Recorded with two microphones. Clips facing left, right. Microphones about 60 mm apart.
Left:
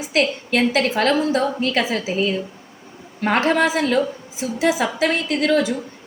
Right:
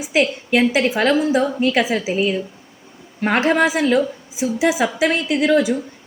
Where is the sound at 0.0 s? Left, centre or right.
Centre.